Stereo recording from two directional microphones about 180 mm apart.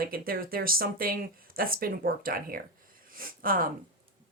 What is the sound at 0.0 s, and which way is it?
Speech, 55° right (ahead or behind).